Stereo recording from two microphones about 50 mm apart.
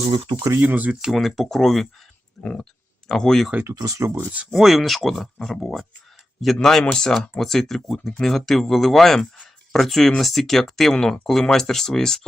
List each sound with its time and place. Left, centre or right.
0.6 s speech: right
1.1 s speech: centre
2.4 s speech: centre
3.6 s speech: right
4.5 s speech: centre